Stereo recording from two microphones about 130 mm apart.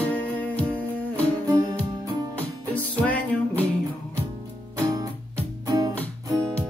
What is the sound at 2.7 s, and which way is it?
Music, 10° left (ahead or behind).